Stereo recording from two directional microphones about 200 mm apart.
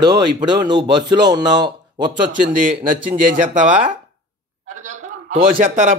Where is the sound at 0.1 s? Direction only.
20° right (ahead or behind).